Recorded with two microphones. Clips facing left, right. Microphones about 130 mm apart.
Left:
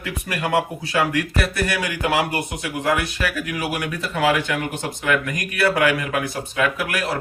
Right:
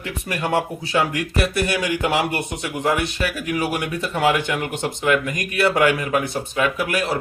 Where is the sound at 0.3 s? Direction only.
25° right (ahead or behind).